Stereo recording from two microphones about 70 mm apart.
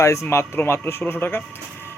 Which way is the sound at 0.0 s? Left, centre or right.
Left.